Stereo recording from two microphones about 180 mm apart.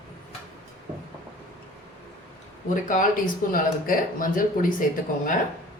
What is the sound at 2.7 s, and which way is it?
Speech, 45° left (ahead or behind).